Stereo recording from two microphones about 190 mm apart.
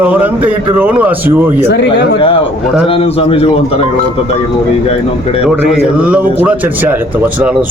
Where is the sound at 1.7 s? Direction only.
60° left (ahead or behind).